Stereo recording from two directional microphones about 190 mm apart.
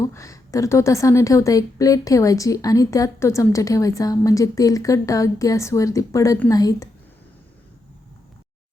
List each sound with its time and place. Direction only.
0.0 s a woman's voice: 15° left (ahead or behind)